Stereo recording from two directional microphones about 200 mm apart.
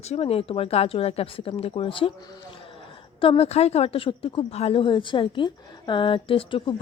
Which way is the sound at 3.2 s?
30° left (ahead or behind).